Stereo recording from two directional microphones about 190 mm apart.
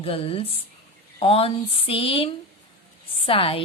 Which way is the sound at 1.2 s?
30° left (ahead or behind).